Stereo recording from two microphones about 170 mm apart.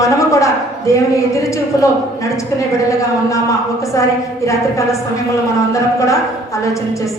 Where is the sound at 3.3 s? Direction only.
20° left (ahead or behind).